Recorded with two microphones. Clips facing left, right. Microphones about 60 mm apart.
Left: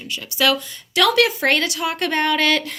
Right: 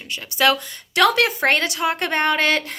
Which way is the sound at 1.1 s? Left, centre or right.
Right.